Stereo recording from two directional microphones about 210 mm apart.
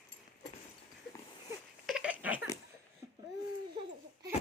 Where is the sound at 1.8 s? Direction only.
5° right (ahead or behind).